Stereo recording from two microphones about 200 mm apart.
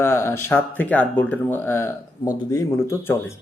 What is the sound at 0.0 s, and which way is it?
Speech, 15° left (ahead or behind).